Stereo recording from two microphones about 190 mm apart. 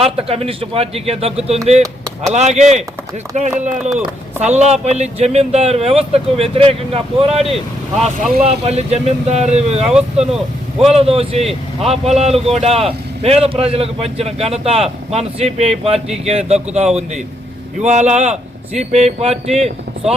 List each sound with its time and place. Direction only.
0.0 s speech: 30° right (ahead or behind)
3.8 s speech: 5° right (ahead or behind)
4.4 s speech: 35° right (ahead or behind)
10.3 s speech: centre (ahead or behind)
10.9 s speech: 30° right (ahead or behind)